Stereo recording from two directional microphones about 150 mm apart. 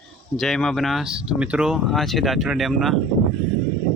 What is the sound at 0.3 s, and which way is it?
Speech, centre (ahead or behind).